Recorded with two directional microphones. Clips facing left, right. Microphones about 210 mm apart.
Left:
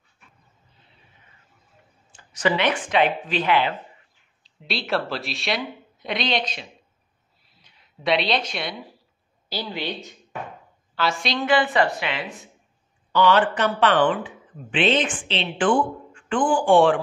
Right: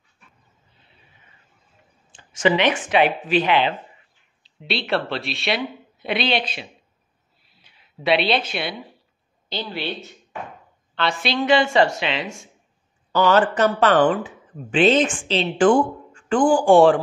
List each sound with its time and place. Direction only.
2.1 s a woman's voice: 20° right (ahead or behind)
4.4 s speech: centre (ahead or behind)
8.0 s speech: 5° right (ahead or behind)
9.5 s a woman's voice: 15° left (ahead or behind)
11.4 s a woman's voice: 25° right (ahead or behind)
13.1 s speech: 45° right (ahead or behind)